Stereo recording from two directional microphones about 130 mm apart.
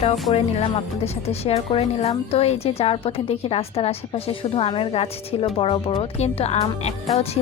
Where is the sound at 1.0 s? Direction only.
50° left (ahead or behind).